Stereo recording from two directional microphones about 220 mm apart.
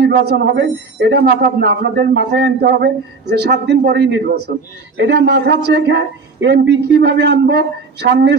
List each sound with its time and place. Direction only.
0.0 s a man's voice: 45° right (ahead or behind)